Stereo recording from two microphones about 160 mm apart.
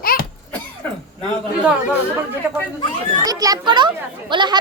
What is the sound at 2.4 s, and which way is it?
Speech, 10° right (ahead or behind).